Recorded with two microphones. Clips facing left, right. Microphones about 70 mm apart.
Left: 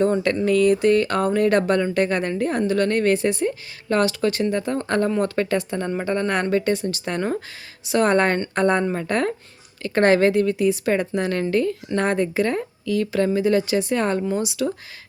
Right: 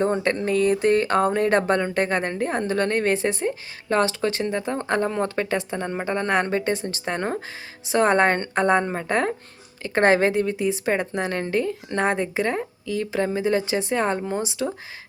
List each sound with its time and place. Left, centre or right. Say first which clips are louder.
0.0 s a woman's voice: left 3 dB; right